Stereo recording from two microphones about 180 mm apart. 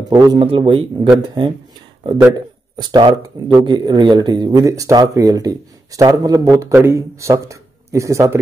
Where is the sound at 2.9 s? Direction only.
25° right (ahead or behind).